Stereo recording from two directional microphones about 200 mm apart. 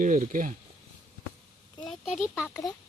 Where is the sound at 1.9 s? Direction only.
5° right (ahead or behind).